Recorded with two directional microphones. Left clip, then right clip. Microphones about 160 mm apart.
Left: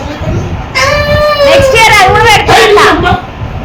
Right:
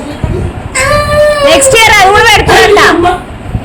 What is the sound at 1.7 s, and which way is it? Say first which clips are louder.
Speech: right 1 dB; 65° right (ahead or behind).